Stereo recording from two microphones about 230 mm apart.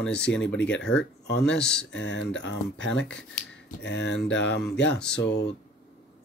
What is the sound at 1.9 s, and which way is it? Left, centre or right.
Speech, left.